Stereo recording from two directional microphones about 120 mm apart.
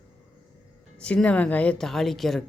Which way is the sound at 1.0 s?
10° left (ahead or behind).